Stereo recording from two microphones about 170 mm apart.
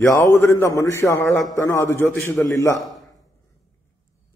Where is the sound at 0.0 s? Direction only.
15° left (ahead or behind).